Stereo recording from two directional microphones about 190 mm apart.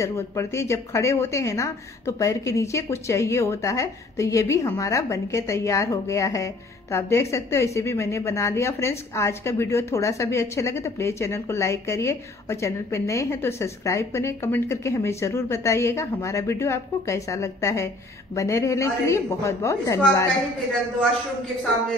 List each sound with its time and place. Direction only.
0.0 s a woman's voice: 15° left (ahead or behind)